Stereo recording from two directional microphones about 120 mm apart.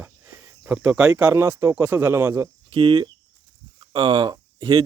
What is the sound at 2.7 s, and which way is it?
Speech, 40° right (ahead or behind).